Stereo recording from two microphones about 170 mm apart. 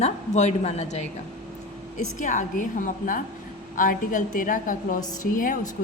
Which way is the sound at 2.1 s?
50° left (ahead or behind).